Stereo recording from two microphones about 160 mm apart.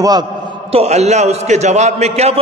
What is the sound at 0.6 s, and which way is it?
A man's voice, 40° right (ahead or behind).